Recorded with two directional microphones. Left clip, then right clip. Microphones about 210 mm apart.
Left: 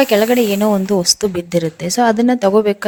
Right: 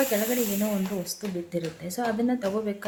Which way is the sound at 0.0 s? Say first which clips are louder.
Left 13 dB; 50° left (ahead or behind).